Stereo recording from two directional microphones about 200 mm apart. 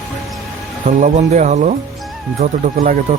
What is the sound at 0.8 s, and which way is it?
Speech, 35° right (ahead or behind).